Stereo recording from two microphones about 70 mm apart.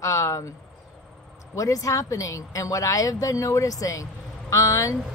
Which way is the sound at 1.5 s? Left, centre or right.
Left.